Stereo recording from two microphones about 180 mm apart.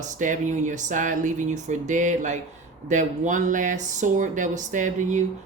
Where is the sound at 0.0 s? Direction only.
45° right (ahead or behind).